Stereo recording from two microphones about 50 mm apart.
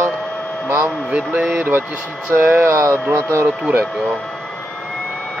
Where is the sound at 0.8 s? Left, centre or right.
Right.